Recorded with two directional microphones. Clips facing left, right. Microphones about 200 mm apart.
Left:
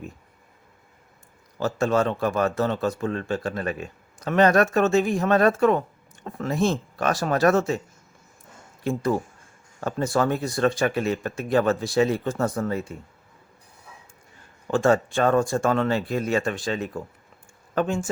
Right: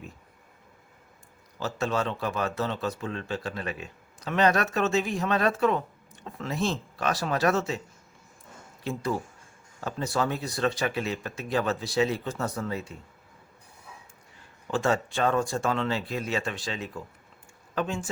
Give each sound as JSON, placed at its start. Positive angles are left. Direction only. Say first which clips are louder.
{"t": 1.5, "sound": "a man's voice", "louder": "left 6 dB", "side_deg": 50}
{"t": 8.8, "sound": "a man's voice", "louder": "left 6 dB", "side_deg": 50}
{"t": 14.7, "sound": "a man's voice", "louder": "left 6 dB", "side_deg": 50}